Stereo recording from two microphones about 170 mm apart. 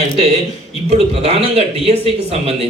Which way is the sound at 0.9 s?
35° right (ahead or behind).